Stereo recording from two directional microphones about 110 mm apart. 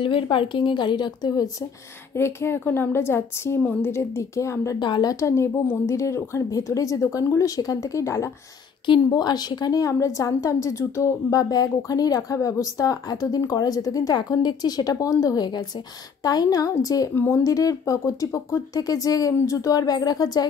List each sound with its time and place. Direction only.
0.0 s speech: 50° left (ahead or behind)
2.1 s a woman's voice: 25° left (ahead or behind)
4.7 s speech: 45° left (ahead or behind)
5.1 s a woman's voice: 25° left (ahead or behind)
17.1 s speech: 15° left (ahead or behind)
17.4 s speech: 30° left (ahead or behind)